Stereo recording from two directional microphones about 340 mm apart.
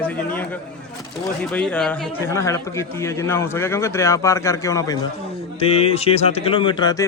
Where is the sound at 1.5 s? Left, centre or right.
Centre.